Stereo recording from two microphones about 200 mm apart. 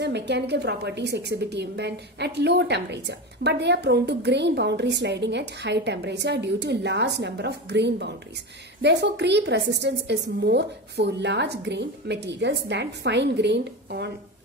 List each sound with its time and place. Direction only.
0.0 s a woman's voice: 60° right (ahead or behind)